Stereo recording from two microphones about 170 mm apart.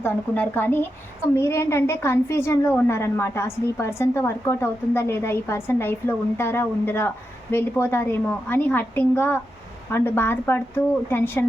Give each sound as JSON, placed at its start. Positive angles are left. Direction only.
{"t": 0.0, "sound": "a woman's voice", "side_deg": 15}